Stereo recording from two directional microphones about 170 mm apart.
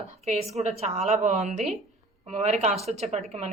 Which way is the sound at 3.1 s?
40° right (ahead or behind).